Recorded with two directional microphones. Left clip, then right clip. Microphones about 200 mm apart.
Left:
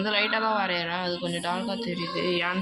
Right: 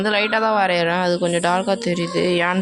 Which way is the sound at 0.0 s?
60° right (ahead or behind).